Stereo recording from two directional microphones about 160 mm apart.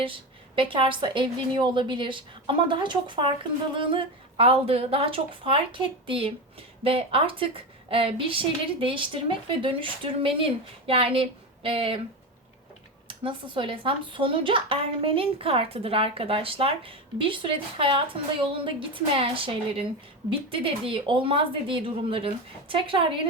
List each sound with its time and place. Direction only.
0.0 s speech: 35° right (ahead or behind)
13.1 s speech: 30° right (ahead or behind)